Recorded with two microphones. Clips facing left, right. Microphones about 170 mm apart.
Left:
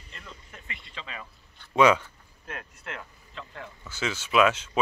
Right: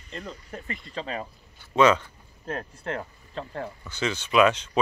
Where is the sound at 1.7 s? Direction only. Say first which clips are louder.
Right 1 dB; 10° left (ahead or behind).